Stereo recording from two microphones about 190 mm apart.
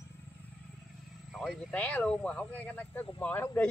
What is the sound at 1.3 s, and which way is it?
Speech, centre (ahead or behind).